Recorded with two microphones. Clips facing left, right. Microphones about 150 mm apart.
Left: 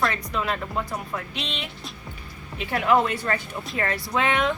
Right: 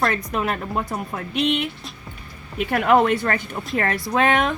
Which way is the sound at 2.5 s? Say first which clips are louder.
Right 4 dB; 55° right (ahead or behind).